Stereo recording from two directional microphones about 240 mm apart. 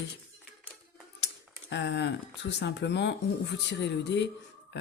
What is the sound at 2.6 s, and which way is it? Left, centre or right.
Speech, left.